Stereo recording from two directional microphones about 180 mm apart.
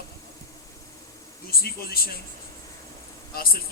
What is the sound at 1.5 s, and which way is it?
Speech, 55° left (ahead or behind).